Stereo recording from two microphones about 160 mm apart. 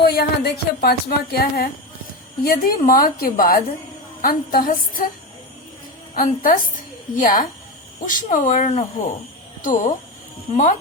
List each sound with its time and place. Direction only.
0.0 s a woman's voice: 90° left; by 5.0 s 60° left (ahead or behind)
6.1 s a woman's voice: 60° left (ahead or behind)